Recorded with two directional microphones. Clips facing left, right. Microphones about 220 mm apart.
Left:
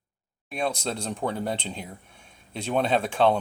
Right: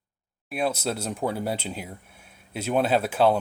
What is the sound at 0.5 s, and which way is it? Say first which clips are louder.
Speech: right 2 dB; 5° right (ahead or behind).